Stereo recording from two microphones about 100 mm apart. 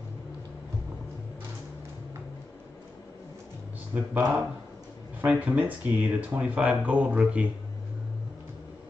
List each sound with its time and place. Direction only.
3.9 s speech: 20° right (ahead or behind)